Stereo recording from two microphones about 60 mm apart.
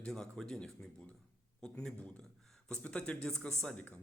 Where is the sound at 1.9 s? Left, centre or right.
Left.